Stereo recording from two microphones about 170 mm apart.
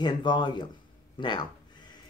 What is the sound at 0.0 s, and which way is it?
Speech, 25° left (ahead or behind).